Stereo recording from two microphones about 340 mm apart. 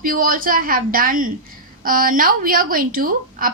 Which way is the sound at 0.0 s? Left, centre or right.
Right.